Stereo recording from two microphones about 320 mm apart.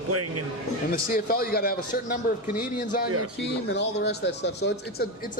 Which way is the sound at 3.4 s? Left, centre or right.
Left.